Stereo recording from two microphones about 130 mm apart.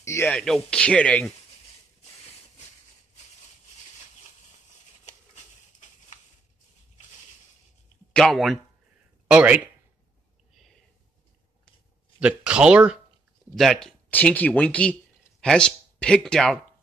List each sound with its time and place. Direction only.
0.0 s a sound: 20° left (ahead or behind)
0.3 s speech: 5° left (ahead or behind)
5.0 s a sound: 65° left (ahead or behind)
8.1 s speech: 5° left (ahead or behind)
9.3 s speech: 10° right (ahead or behind)
12.2 s speech: 10° right (ahead or behind)
13.6 s speech: centre (ahead or behind)